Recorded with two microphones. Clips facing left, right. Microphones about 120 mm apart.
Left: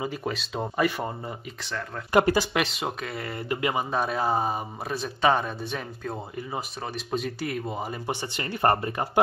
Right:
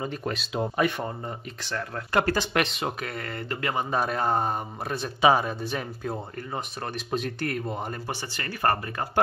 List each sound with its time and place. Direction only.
0.0 s speech: 5° left (ahead or behind)
2.1 s speech: 15° left (ahead or behind)
2.5 s speech: centre (ahead or behind)
3.9 s speech: centre (ahead or behind)
8.1 s speech: 20° left (ahead or behind)